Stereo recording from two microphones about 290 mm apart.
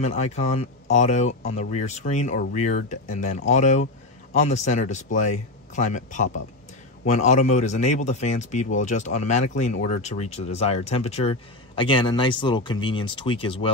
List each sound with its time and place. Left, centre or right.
0.0 s a man's voice: left